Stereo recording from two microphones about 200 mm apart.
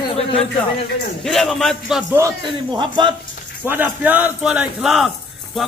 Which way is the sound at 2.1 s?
20° right (ahead or behind).